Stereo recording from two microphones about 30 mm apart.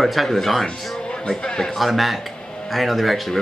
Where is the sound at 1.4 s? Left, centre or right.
Left.